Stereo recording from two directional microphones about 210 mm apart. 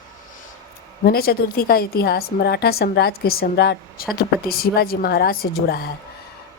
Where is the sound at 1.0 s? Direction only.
45° left (ahead or behind).